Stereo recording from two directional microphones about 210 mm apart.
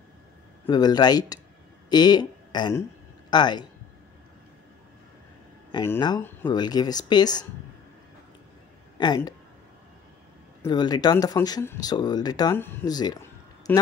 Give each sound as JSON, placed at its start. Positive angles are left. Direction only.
{"t": 0.7, "sound": "a man's voice", "side_deg": 20}
{"t": 5.7, "sound": "speech", "side_deg": 20}
{"t": 8.9, "sound": "speech", "side_deg": 20}
{"t": 10.6, "sound": "speech", "side_deg": 20}